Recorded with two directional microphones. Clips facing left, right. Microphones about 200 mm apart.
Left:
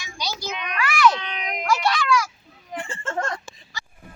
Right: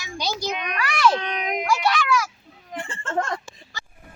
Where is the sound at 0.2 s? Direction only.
45° right (ahead or behind).